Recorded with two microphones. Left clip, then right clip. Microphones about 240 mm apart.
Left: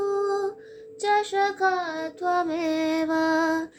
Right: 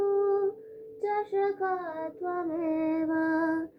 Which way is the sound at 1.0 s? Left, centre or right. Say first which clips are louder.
Left 6 dB; left.